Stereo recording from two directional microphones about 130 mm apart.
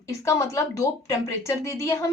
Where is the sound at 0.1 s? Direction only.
25° left (ahead or behind).